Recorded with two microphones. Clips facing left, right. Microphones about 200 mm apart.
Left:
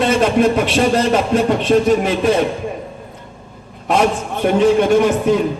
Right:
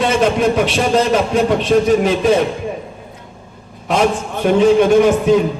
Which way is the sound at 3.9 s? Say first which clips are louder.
Even; 55° left (ahead or behind).